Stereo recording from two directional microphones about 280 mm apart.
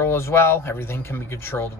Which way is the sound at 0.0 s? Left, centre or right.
Centre.